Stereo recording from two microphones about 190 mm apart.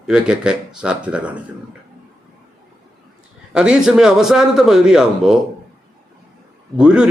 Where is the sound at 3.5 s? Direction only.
5° right (ahead or behind).